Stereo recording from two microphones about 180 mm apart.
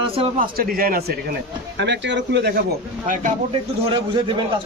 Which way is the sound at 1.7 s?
70° right (ahead or behind).